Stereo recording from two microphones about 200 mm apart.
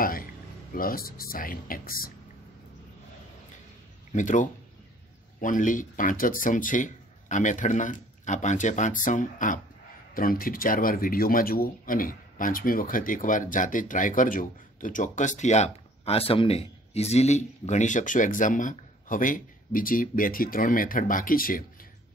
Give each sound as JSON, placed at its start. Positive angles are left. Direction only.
{"t": 0.0, "sound": "a sound", "side_deg": 45}
{"t": 0.7, "sound": "speech", "side_deg": 45}
{"t": 4.1, "sound": "speech", "side_deg": 40}